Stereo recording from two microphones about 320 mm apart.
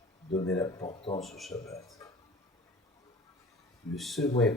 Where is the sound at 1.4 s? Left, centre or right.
Centre.